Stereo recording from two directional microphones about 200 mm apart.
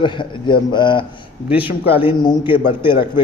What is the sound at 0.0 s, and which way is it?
A man's voice, 25° left (ahead or behind).